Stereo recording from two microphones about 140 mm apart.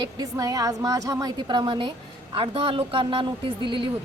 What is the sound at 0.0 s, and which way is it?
A woman's voice, 25° right (ahead or behind).